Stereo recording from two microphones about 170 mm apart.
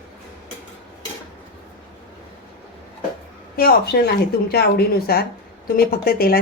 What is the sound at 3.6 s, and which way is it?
A woman's voice, 65° left (ahead or behind).